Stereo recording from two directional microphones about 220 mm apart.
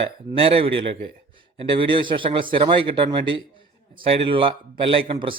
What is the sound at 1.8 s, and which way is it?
A man's voice, 20° right (ahead or behind).